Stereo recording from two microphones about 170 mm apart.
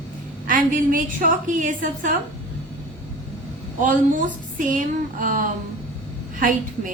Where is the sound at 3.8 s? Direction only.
50° right (ahead or behind).